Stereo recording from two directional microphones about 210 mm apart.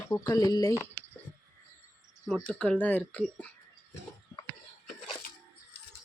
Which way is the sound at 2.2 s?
Centre (ahead or behind).